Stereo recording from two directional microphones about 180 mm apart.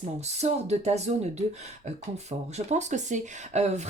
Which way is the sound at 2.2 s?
40° right (ahead or behind).